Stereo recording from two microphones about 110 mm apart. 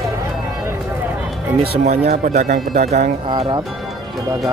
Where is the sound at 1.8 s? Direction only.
90° right.